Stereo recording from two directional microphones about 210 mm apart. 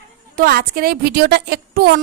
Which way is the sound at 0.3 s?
45° right (ahead or behind).